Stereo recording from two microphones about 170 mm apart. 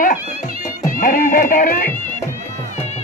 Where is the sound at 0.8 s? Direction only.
55° left (ahead or behind).